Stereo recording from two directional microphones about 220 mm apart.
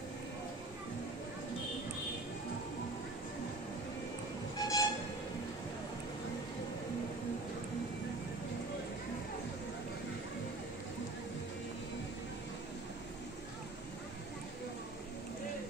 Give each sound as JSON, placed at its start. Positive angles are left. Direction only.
{"t": 4.6, "sound": "train", "side_deg": 15}